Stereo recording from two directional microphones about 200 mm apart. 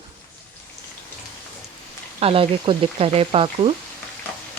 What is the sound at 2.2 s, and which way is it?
Speech, 25° right (ahead or behind).